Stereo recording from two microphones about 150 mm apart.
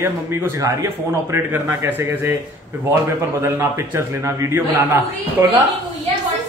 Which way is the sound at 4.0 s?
20° right (ahead or behind).